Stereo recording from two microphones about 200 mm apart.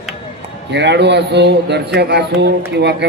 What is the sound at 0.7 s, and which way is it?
Speech, 60° right (ahead or behind).